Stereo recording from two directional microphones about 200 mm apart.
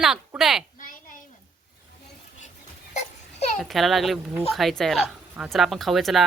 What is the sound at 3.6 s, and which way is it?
A woman's voice, centre (ahead or behind).